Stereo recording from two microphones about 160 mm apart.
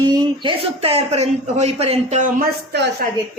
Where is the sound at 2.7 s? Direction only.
90° right.